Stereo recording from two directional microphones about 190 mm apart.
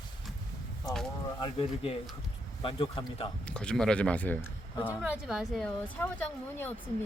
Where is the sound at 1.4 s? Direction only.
30° left (ahead or behind).